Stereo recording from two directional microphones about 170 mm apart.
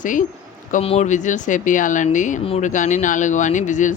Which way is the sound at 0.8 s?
40° left (ahead or behind).